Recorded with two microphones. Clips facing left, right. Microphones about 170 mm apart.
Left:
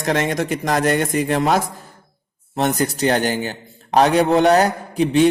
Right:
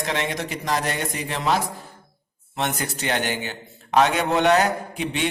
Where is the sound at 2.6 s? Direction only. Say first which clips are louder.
Left 8 dB; 40° left (ahead or behind).